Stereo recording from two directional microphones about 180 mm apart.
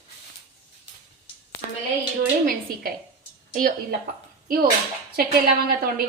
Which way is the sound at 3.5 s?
50° right (ahead or behind).